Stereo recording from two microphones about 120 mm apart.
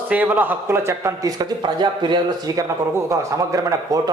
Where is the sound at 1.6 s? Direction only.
40° right (ahead or behind).